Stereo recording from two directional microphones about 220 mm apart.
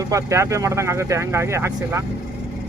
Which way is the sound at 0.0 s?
15° right (ahead or behind).